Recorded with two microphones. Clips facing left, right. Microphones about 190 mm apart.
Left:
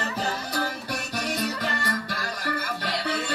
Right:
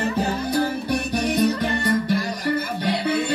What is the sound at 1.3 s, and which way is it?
Music, 20° right (ahead or behind).